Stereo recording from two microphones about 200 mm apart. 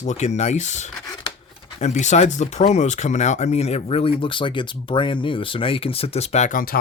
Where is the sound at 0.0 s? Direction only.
35° left (ahead or behind).